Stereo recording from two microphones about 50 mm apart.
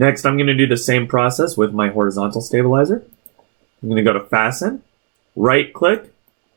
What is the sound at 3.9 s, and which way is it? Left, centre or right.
Speech, left.